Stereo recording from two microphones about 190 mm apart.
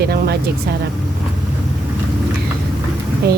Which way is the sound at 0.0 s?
55° right (ahead or behind).